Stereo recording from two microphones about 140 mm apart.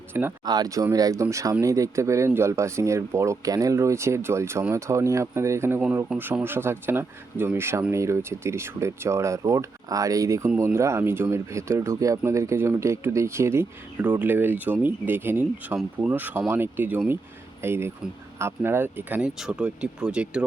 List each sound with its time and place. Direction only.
0.1 s speech: 15° right (ahead or behind)
0.4 s speech: 30° right (ahead or behind); by 20.4 s 5° right (ahead or behind)